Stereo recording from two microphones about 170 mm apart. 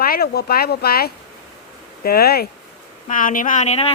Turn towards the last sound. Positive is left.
turn(degrees=40)  # may be behind; listen again after turning